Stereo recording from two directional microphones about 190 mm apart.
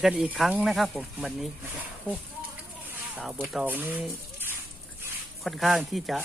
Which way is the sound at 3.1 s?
5° right (ahead or behind).